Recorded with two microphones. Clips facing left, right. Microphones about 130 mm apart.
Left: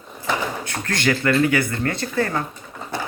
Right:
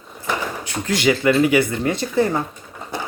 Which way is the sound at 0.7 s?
15° right (ahead or behind).